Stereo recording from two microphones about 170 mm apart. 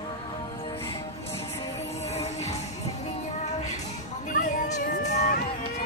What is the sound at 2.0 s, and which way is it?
Music, 40° left (ahead or behind).